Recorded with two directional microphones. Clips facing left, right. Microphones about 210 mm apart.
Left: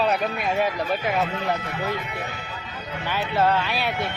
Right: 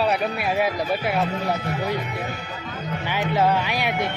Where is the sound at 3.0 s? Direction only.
15° right (ahead or behind).